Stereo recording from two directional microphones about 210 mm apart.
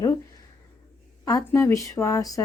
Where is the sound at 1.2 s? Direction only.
15° left (ahead or behind).